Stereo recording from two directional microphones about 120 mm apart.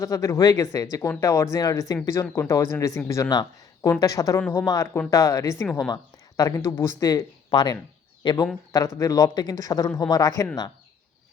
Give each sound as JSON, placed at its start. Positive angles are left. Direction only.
{"t": 0.0, "sound": "speech", "side_deg": 25}
{"t": 9.0, "sound": "speech", "side_deg": 30}